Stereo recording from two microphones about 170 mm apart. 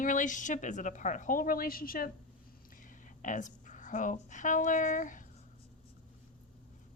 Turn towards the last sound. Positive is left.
turn(degrees=50)  # may be behind; listen again after turning